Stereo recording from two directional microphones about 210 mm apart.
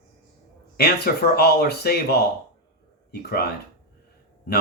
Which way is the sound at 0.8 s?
50° left (ahead or behind).